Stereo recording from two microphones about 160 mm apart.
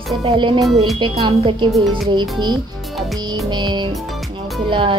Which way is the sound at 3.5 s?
30° right (ahead or behind).